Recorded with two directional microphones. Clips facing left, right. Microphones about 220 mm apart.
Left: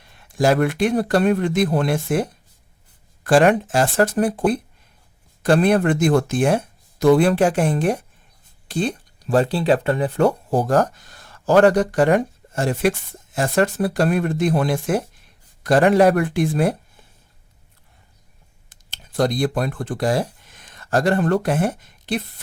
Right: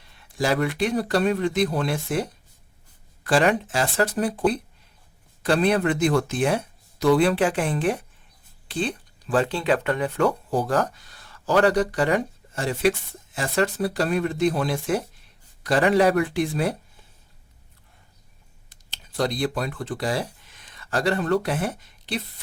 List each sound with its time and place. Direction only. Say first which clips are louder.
0.3 s speech: left 5 dB; 50° left (ahead or behind)
3.2 s speech: left 5 dB; 50° left (ahead or behind)
18.7 s speech: left 3 dB; 50° left (ahead or behind)